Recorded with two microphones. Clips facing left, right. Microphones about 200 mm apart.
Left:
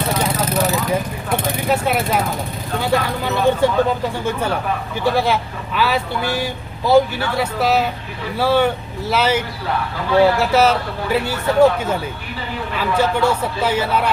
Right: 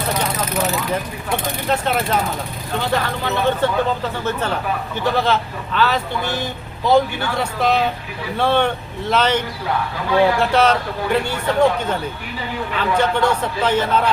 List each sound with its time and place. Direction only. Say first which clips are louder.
1.6 s speech: left 1 dB; 10° left (ahead or behind)
10.4 s speech: left 1 dB; 5° left (ahead or behind)